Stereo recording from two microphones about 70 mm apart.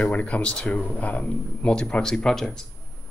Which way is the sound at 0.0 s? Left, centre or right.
Centre.